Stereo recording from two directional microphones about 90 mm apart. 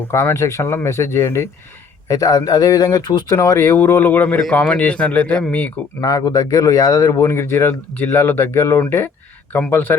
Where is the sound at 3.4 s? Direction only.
30° left (ahead or behind); by 5.7 s 15° left (ahead or behind).